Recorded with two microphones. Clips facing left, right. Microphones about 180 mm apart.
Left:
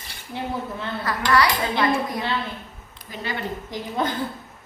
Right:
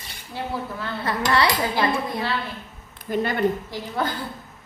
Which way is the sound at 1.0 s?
25° right (ahead or behind).